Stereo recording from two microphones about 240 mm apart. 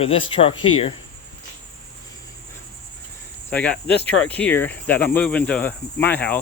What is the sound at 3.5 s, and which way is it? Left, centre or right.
Speech, centre.